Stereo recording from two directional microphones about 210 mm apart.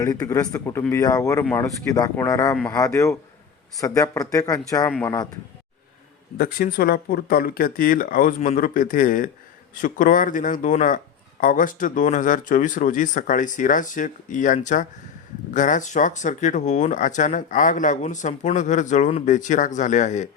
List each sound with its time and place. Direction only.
0.0 s speech: 15° left (ahead or behind)
2.5 s speech: 5° left (ahead or behind)
2.7 s speech: 15° left (ahead or behind)
6.3 s speech: 45° left (ahead or behind)